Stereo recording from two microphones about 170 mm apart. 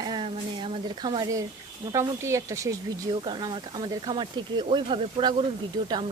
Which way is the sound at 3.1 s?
30° right (ahead or behind).